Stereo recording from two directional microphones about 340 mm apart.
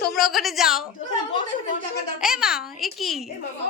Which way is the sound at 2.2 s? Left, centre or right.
Centre.